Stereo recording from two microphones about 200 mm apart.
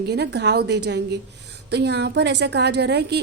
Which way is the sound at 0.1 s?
55° right (ahead or behind).